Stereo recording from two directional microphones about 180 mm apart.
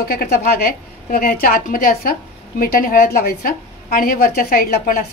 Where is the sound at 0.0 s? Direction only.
55° left (ahead or behind).